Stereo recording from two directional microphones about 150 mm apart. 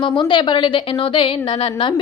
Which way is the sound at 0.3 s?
35° left (ahead or behind).